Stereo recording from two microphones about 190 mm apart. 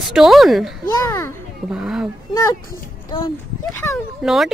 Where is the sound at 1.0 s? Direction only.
15° left (ahead or behind).